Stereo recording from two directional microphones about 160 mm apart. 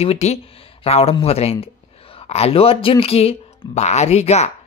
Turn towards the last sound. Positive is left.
turn(degrees=45)  # may be behind; listen again after turning